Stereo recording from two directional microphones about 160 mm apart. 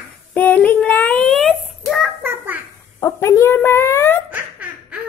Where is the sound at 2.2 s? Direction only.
10° right (ahead or behind).